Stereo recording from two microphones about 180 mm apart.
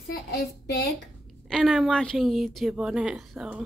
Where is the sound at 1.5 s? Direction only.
Centre (ahead or behind).